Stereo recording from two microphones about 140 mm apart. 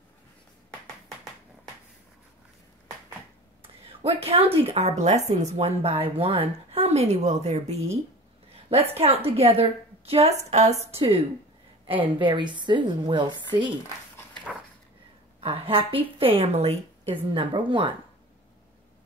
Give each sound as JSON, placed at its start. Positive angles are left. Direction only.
{"t": 4.0, "sound": "a woman's voice", "side_deg": -45}
{"t": 15.4, "sound": "a woman's voice", "side_deg": -40}